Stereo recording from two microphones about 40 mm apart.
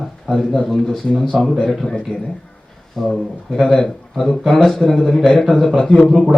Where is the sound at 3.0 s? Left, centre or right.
Centre.